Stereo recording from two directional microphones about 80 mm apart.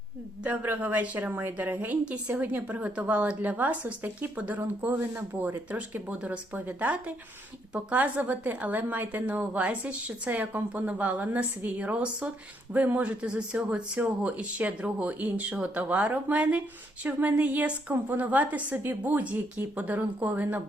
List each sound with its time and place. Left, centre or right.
0.4 s speech: centre